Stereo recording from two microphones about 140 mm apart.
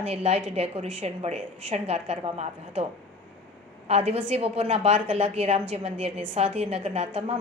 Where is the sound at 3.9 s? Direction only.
45° right (ahead or behind).